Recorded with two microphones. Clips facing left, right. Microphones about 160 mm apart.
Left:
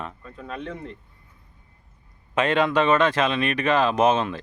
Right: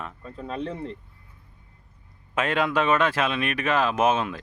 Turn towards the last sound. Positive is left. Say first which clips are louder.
# left 2 dB
turn(degrees=-5)  # may be behind; listen again after turning